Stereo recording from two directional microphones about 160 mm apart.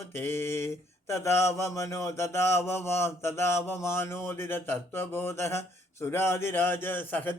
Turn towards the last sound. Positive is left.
turn(degrees=10)  # may be behind; listen again after turning